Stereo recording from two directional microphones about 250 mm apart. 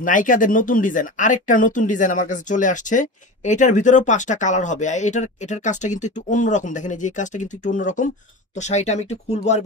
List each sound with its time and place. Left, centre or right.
0.0 s speech: left